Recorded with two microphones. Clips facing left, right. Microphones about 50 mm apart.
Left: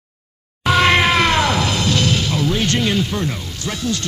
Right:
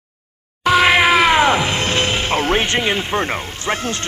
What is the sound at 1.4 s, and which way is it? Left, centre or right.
Music, right.